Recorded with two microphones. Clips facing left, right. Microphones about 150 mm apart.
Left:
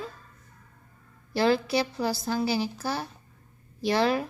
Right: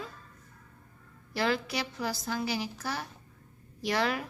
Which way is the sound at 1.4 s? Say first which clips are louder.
Left 7 dB; 30° left (ahead or behind).